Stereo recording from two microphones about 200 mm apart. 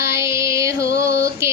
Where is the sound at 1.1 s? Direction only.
55° left (ahead or behind).